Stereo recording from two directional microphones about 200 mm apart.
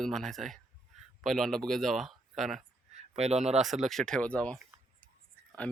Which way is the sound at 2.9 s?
30° right (ahead or behind).